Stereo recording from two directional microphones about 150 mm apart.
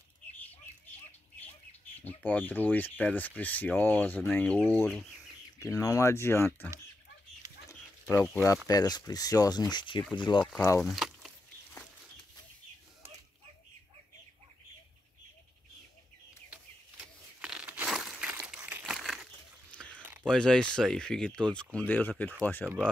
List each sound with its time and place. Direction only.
2.0 s speech: 10° left (ahead or behind)
8.6 s speech: 25° left (ahead or behind)
10.4 s speech: 5° left (ahead or behind)
10.8 s a sound: centre (ahead or behind)
16.4 s a sound: 10° right (ahead or behind)
17.5 s crumpling: 10° right (ahead or behind)
19.9 s biting: 10° right (ahead or behind)
20.2 s speech: 5° left (ahead or behind)